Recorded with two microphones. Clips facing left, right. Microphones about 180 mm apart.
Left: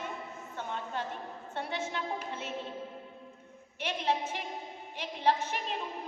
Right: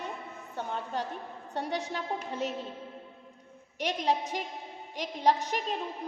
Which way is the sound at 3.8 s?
40° right (ahead or behind).